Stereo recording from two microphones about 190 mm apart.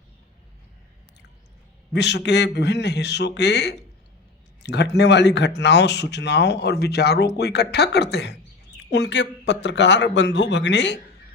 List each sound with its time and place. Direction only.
1.9 s speech: 65° left (ahead or behind)